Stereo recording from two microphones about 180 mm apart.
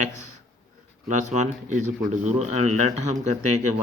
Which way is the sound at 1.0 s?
40° right (ahead or behind).